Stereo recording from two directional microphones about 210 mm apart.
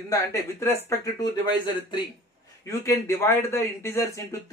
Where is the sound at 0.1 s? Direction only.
15° left (ahead or behind).